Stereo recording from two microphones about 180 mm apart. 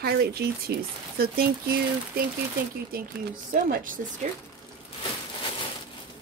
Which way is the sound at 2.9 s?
55° right (ahead or behind).